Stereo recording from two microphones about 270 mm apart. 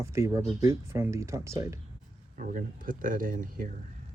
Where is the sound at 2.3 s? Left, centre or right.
Right.